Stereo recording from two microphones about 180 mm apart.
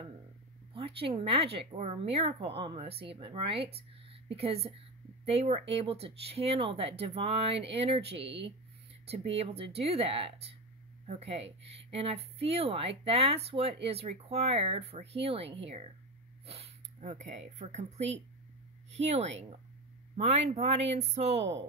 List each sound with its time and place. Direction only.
0.7 s a woman's voice: 30° right (ahead or behind)